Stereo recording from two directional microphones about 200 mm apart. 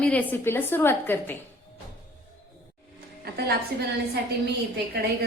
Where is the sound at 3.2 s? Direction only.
50° right (ahead or behind).